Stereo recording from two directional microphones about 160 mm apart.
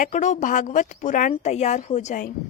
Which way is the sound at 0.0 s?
50° left (ahead or behind).